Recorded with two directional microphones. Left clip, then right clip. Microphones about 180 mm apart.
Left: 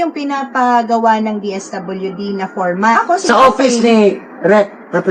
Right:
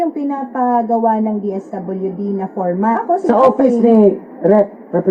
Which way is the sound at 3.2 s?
35° right (ahead or behind).